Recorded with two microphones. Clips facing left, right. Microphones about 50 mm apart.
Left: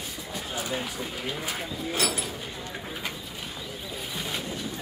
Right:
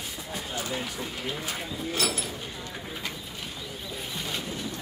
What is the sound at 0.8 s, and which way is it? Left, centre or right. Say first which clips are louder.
Speech: left 1 dB; centre.